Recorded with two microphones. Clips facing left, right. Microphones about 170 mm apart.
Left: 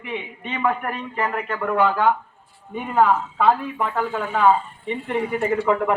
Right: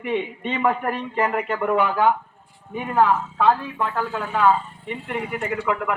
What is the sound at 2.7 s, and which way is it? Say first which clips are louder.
A woman's voice: left 1 dB; centre (ahead or behind).